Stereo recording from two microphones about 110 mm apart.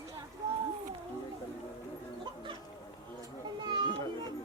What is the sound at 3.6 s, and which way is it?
Children playing, 45° right (ahead or behind).